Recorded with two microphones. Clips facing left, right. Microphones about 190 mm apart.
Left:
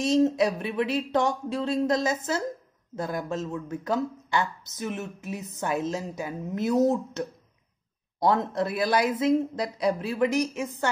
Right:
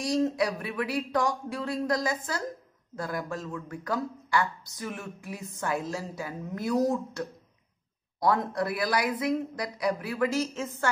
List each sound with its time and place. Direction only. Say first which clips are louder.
0.0 s speech: left 5 dB; 25° left (ahead or behind)